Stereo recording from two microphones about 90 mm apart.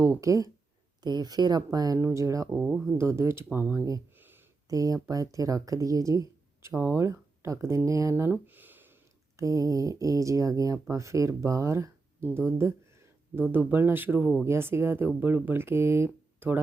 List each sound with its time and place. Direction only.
0.0 s speech: 35° right (ahead or behind)
1.0 s speech: 50° right (ahead or behind)
2.0 s speech: 30° right (ahead or behind)
2.6 s speech: 5° right (ahead or behind)
3.0 s speech: 30° right (ahead or behind)
4.1 s a sound: 25° right (ahead or behind)
4.7 s speech: 40° right (ahead or behind)
8.1 s a sound: 25° right (ahead or behind)
9.3 s speech: 35° right (ahead or behind)